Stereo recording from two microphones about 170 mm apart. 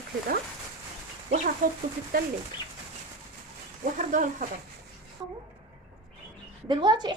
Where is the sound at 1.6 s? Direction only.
50° right (ahead or behind).